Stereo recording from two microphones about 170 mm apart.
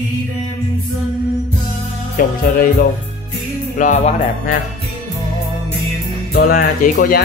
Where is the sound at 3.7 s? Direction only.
50° left (ahead or behind).